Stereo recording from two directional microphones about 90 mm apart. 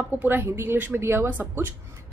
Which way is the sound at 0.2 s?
25° right (ahead or behind).